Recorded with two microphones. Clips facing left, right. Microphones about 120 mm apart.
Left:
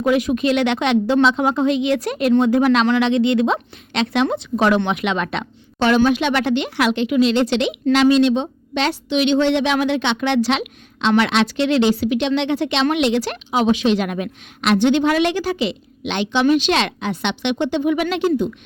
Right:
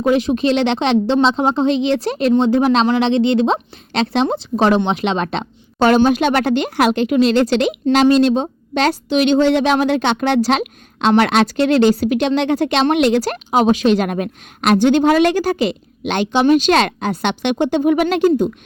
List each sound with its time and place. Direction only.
0.0 s speech: 30° right (ahead or behind)